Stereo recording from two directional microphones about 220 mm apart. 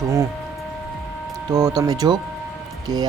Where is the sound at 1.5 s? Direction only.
15° right (ahead or behind).